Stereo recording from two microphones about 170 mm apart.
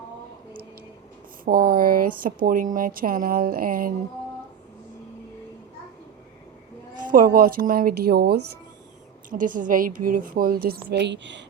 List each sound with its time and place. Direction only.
1.5 s speech: 60° right (ahead or behind)
7.0 s speech: 50° right (ahead or behind)
9.3 s speech: 50° right (ahead or behind); by 11.4 s 90° right